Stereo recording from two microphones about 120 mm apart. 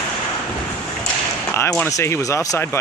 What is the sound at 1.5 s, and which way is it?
Speech, 20° left (ahead or behind).